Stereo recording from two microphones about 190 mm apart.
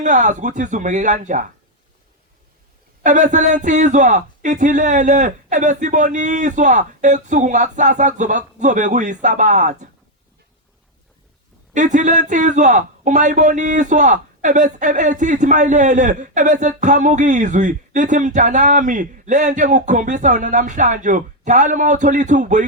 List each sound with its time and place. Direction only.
0.0 s a man's voice: 40° right (ahead or behind)
3.0 s a man's voice: 40° right (ahead or behind)
11.7 s a man's voice: 40° right (ahead or behind)